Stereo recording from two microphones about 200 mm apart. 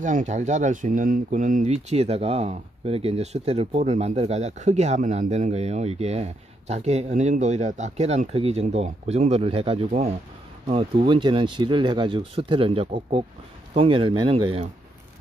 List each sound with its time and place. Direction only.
0.0 s speech: 40° right (ahead or behind)